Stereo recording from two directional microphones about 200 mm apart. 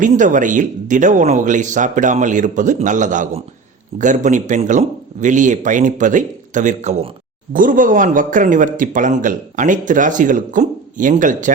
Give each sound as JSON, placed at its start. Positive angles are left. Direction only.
{"t": 0.0, "sound": "a man's voice", "side_deg": -40}